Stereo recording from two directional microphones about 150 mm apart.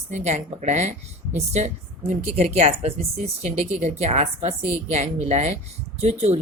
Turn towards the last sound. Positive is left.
turn(degrees=-45)  # may be behind; listen again after turning